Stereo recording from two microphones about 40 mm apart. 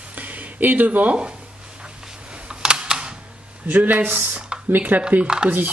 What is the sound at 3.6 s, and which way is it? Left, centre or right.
Speech, right.